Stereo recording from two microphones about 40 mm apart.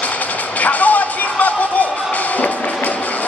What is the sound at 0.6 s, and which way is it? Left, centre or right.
Speech, left.